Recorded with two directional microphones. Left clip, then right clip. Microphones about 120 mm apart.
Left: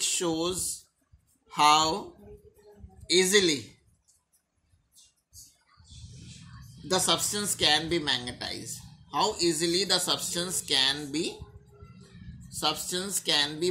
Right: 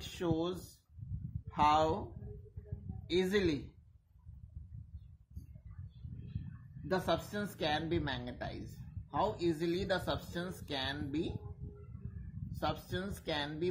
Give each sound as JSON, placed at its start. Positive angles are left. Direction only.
{"t": 0.2, "sound": "speech", "side_deg": -25}
{"t": 3.1, "sound": "speech", "side_deg": -25}
{"t": 6.9, "sound": "speech", "side_deg": -25}
{"t": 12.6, "sound": "speech", "side_deg": -30}